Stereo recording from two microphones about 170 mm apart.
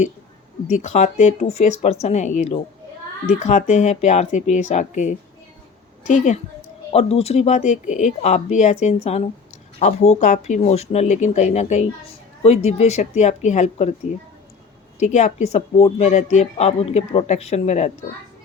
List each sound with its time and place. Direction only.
0.7 s a woman's voice: 45° left (ahead or behind)
14.9 s a woman's voice: 45° left (ahead or behind)